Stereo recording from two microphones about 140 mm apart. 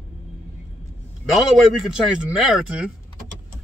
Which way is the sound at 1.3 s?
Centre (ahead or behind).